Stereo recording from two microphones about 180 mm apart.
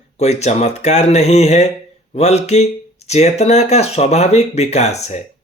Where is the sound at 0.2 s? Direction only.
40° left (ahead or behind).